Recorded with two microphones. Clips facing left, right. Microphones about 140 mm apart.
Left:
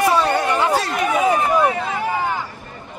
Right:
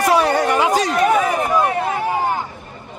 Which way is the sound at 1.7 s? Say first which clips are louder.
Right 2 dB; 45° right (ahead or behind).